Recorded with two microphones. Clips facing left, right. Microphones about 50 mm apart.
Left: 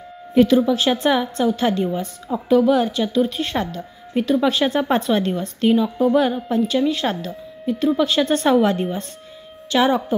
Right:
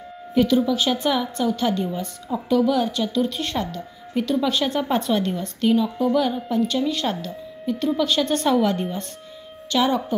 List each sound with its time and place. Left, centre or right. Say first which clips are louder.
0.3 s speech: left 4 dB; left